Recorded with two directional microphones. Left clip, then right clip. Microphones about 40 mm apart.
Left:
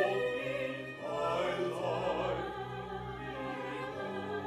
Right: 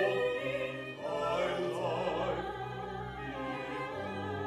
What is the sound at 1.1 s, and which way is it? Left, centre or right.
Music, right.